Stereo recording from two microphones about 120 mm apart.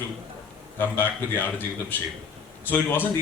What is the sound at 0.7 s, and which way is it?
Speech, 20° left (ahead or behind).